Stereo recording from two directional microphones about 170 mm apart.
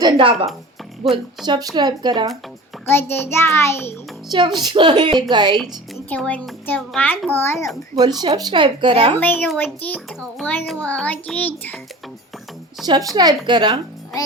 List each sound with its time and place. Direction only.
0.0 s speech: 30° right (ahead or behind)
2.9 s a child's voice: 15° left (ahead or behind)
4.3 s speech: 25° right (ahead or behind)
6.1 s a child's voice: 10° left (ahead or behind)
8.2 s speech: 25° right (ahead or behind)
9.1 s a child's voice: 10° left (ahead or behind)
12.8 s speech: 25° right (ahead or behind)